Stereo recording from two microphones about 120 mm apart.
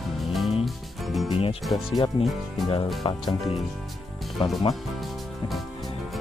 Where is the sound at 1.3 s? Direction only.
50° left (ahead or behind).